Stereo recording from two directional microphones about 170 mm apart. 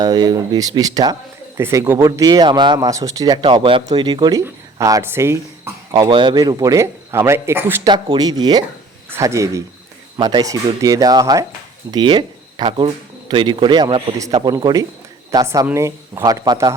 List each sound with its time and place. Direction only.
0.0 s speech: 20° right (ahead or behind)
5.9 s speech: 30° right (ahead or behind); by 7.8 s 15° right (ahead or behind)
7.9 s speech: 25° right (ahead or behind)